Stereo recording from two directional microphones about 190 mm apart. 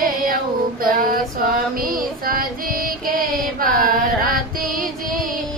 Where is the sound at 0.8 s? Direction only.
50° right (ahead or behind).